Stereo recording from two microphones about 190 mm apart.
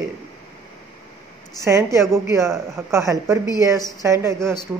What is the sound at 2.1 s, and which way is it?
A woman's voice, 15° right (ahead or behind).